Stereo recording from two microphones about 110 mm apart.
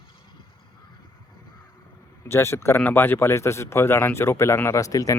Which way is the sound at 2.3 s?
20° left (ahead or behind).